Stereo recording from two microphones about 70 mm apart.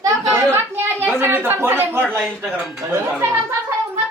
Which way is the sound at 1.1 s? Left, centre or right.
Right.